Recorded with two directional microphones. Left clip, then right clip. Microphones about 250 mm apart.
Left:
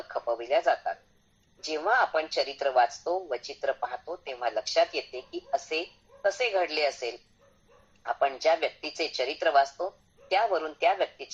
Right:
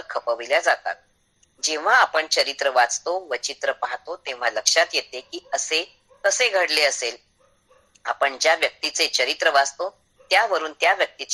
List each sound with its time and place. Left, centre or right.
0.1 s speech: right